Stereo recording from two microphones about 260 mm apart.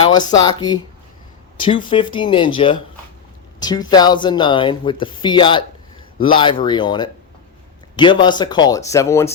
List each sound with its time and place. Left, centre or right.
0.0 s speech: centre